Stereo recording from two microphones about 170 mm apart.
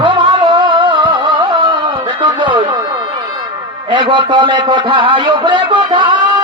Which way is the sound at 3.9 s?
30° right (ahead or behind).